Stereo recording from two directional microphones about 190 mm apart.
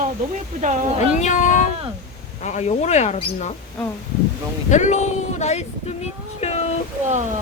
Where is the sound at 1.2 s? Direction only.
40° left (ahead or behind).